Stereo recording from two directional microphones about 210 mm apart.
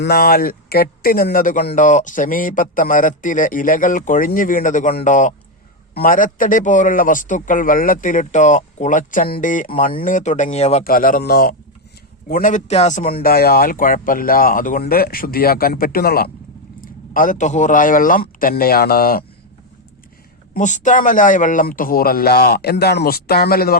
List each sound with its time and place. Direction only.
0.0 s speech: 45° left (ahead or behind); by 10.8 s 30° left (ahead or behind)
10.8 s speech: 40° left (ahead or behind)
20.5 s speech: 35° left (ahead or behind)